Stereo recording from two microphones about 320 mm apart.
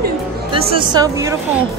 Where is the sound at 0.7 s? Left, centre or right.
Centre.